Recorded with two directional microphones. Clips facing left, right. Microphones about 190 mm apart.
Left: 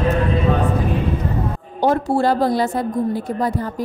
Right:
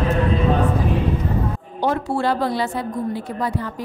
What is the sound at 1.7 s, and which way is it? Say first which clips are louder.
A woman's voice: left 5 dB; 40° left (ahead or behind).